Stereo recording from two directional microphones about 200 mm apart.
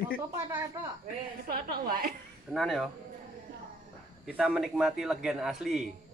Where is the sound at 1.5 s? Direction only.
45° right (ahead or behind).